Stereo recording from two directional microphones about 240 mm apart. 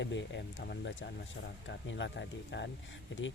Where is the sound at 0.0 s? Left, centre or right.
Left.